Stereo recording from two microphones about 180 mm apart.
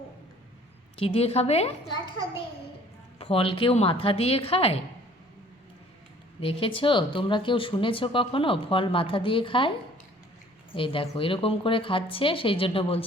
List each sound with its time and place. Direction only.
0.9 s a woman's voice: 30° left (ahead or behind)
6.4 s speech: 30° left (ahead or behind)
10.8 s speech: 30° left (ahead or behind)